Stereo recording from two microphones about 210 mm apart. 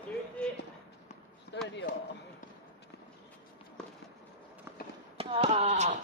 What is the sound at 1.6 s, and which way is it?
Speech, 60° left (ahead or behind).